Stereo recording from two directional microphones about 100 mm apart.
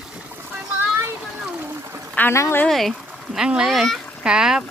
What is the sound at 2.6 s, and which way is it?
Speech, centre (ahead or behind).